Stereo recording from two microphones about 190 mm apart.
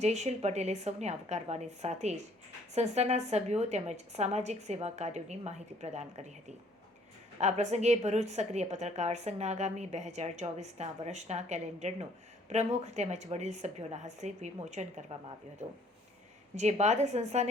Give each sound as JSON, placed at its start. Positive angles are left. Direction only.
{"t": 0.0, "sound": "a woman's voice", "side_deg": -35}
{"t": 7.3, "sound": "a woman's voice", "side_deg": -35}
{"t": 16.6, "sound": "a woman's voice", "side_deg": -35}